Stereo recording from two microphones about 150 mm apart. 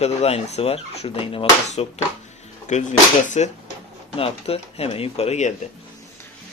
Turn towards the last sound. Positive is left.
turn(degrees=50)  # may be behind; listen again after turning